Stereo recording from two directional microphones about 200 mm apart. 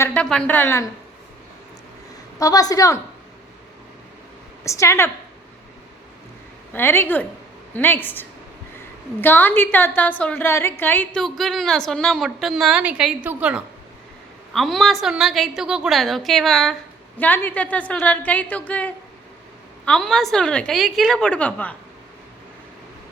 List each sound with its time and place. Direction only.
0.0 s a woman's voice: 5° left (ahead or behind)
2.4 s a woman's voice: 20° left (ahead or behind)
4.6 s a woman's voice: 15° left (ahead or behind)
6.7 s a woman's voice: 10° left (ahead or behind)